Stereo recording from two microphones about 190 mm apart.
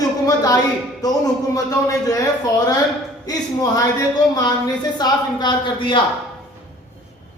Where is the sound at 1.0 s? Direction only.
20° left (ahead or behind).